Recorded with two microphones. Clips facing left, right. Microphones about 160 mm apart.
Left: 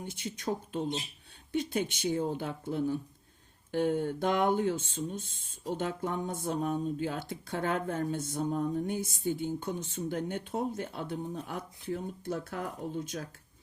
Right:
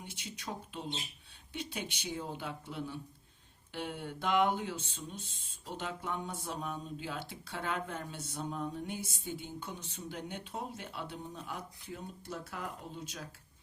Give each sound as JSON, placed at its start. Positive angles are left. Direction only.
{"t": 0.0, "sound": "speech", "side_deg": 50}